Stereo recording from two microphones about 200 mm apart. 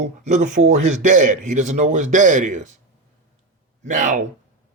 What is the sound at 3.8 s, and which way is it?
Speech, 40° right (ahead or behind).